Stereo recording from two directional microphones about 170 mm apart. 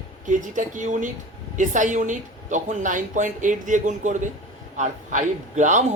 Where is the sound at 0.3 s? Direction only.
50° right (ahead or behind).